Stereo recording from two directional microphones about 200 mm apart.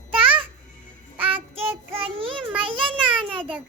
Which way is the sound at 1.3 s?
25° right (ahead or behind).